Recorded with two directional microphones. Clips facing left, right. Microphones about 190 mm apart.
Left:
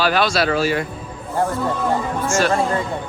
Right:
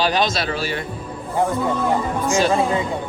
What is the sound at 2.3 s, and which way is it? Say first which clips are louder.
Speech: right 1 dB; 15° right (ahead or behind).